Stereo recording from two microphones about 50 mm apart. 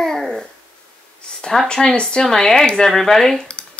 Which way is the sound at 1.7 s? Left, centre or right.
Centre.